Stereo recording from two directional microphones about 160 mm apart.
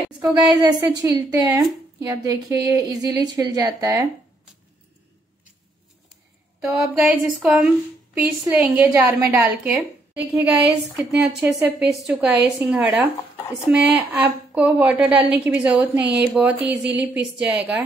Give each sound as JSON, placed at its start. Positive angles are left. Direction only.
{"t": 0.5, "sound": "a woman's voice", "side_deg": -25}
{"t": 6.6, "sound": "a woman's voice", "side_deg": -10}